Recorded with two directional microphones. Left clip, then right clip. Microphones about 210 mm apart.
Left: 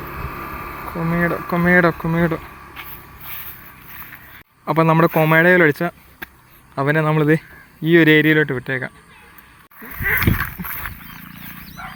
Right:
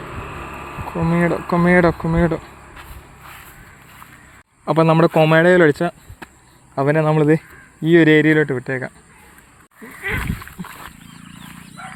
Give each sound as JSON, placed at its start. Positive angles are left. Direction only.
{"t": 0.0, "sound": "vehicle", "side_deg": 45}
{"t": 0.9, "sound": "speech", "side_deg": -20}
{"t": 4.6, "sound": "speech", "side_deg": -10}
{"t": 10.6, "sound": "wild animals", "side_deg": 0}
{"t": 11.8, "sound": "dog", "side_deg": -60}